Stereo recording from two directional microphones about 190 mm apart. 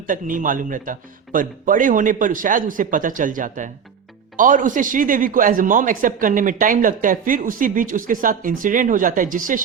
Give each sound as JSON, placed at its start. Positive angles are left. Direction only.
{"t": 0.1, "sound": "a man's voice", "side_deg": -45}